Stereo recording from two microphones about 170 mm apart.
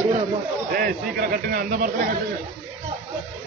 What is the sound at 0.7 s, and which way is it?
A man's voice, 60° right (ahead or behind).